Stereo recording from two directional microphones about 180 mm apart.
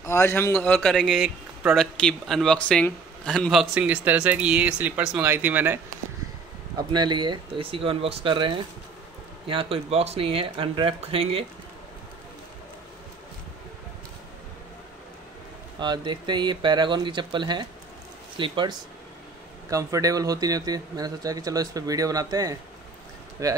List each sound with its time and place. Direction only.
0.0 s a man's voice: 15° left (ahead or behind); by 5.8 s 10° right (ahead or behind)
6.9 s speech: 25° right (ahead or behind)
15.8 s a man's voice: 25° right (ahead or behind)